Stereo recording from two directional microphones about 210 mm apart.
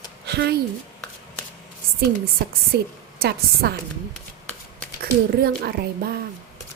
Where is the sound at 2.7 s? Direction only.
45° right (ahead or behind).